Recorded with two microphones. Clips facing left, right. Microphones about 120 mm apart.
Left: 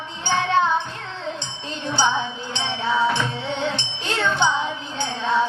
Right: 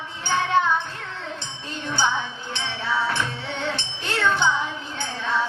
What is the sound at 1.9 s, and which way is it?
Music, 20° left (ahead or behind).